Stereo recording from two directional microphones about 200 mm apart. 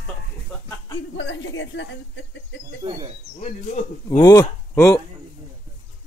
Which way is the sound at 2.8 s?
25° right (ahead or behind).